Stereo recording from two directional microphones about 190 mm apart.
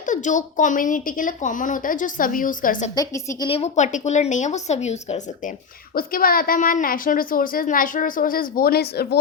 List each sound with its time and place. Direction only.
0.0 s a woman's voice: 40° left (ahead or behind)
2.9 s a woman's voice: 20° left (ahead or behind); by 5.2 s 35° left (ahead or behind)
5.9 s a woman's voice: 50° left (ahead or behind)